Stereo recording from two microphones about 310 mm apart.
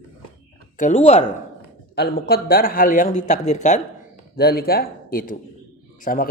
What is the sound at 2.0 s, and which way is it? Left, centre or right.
A man's voice, left.